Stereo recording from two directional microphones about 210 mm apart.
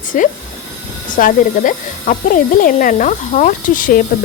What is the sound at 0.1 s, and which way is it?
Speech, 40° left (ahead or behind).